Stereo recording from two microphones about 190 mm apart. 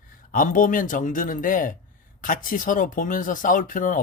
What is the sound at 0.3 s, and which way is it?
Speech, 45° left (ahead or behind).